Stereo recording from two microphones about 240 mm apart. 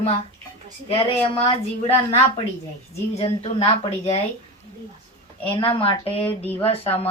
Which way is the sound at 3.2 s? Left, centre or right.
Left.